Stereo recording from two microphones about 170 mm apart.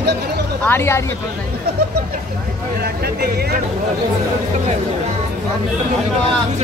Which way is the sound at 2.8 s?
70° right (ahead or behind).